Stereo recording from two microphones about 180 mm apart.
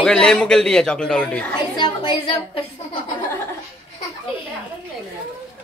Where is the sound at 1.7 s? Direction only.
25° left (ahead or behind).